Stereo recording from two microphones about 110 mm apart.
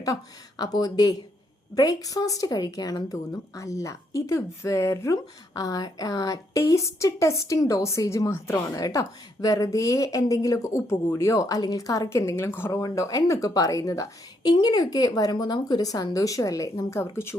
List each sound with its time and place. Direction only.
0.6 s a woman's voice: 35° left (ahead or behind)